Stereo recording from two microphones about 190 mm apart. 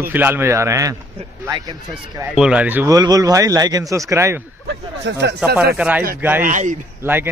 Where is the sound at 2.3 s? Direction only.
5° right (ahead or behind).